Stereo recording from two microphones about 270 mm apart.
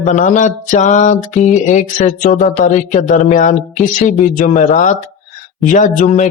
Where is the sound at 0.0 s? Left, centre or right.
Left.